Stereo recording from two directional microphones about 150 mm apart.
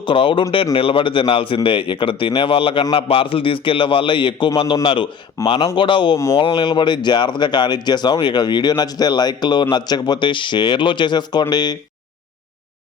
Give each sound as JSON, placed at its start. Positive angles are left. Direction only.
{"t": 0.0, "sound": "speech", "side_deg": 35}
{"t": 6.1, "sound": "speech", "side_deg": 20}
{"t": 6.4, "sound": "speech", "side_deg": 35}